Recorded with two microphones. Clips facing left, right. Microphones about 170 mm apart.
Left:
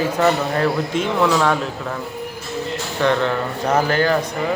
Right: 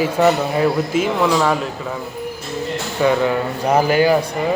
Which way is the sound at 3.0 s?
10° right (ahead or behind).